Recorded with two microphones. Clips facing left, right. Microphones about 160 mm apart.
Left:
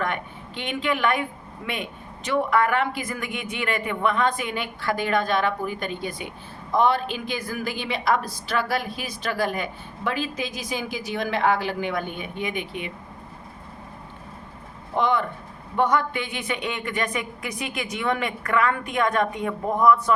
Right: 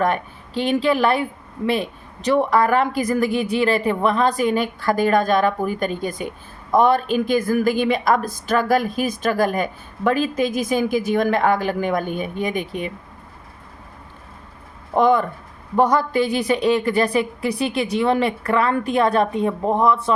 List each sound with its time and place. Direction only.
0.0 s a woman's voice: 35° right (ahead or behind)
14.9 s a woman's voice: 45° right (ahead or behind); by 20.1 s 25° right (ahead or behind)